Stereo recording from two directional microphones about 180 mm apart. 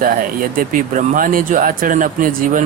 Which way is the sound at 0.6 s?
50° right (ahead or behind).